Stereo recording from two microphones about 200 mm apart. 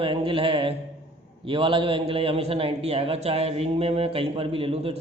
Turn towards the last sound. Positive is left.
turn(degrees=-30)  # may be behind; listen again after turning